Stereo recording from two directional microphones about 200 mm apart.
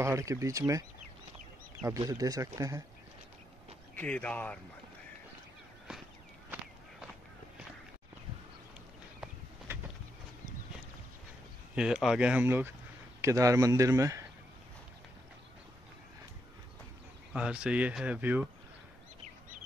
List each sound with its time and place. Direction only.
0.0 s speech: 15° right (ahead or behind)
1.9 s speech: 20° right (ahead or behind)
3.9 s speech: 5° left (ahead or behind)
11.7 s speech: 5° right (ahead or behind)
17.3 s speech: 5° right (ahead or behind)